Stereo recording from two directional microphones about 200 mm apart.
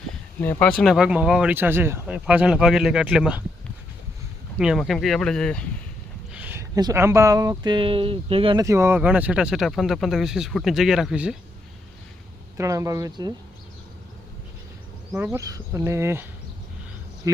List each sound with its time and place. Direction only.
0.8 s speech: centre (ahead or behind)
4.5 s speech: 5° right (ahead or behind)
6.3 s speech: 10° right (ahead or behind)
12.5 s speech: 15° right (ahead or behind)
15.1 s speech: 10° right (ahead or behind)
17.2 s speech: 15° right (ahead or behind)